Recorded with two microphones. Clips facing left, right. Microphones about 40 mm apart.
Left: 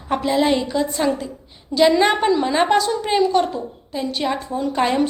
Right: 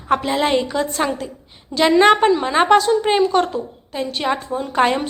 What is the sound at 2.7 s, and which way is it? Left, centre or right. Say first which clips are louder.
A woman's voice: right 4 dB; right.